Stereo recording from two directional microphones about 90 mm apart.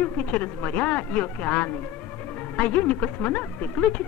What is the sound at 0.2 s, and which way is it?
Speech, 15° left (ahead or behind).